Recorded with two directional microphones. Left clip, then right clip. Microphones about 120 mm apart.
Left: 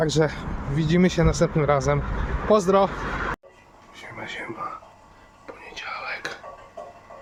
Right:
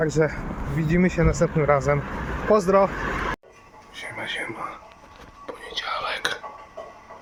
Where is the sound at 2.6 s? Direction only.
10° left (ahead or behind).